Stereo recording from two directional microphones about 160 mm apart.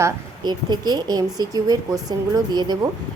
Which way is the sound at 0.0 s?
25° right (ahead or behind).